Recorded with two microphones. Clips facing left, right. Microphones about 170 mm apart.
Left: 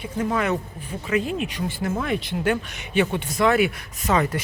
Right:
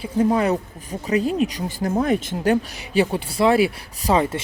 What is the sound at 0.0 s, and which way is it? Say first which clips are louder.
Speech: right 5 dB; 30° right (ahead or behind).